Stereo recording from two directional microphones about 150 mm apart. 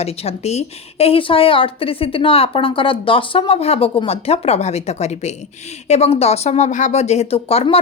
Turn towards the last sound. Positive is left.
turn(degrees=40)  # may be behind; listen again after turning